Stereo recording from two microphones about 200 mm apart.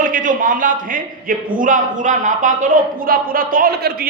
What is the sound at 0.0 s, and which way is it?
A woman's voice, 40° right (ahead or behind).